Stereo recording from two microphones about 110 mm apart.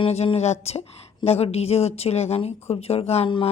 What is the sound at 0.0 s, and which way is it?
A woman's voice, 60° left (ahead or behind).